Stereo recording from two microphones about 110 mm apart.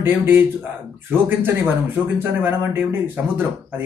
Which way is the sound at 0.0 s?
20° right (ahead or behind).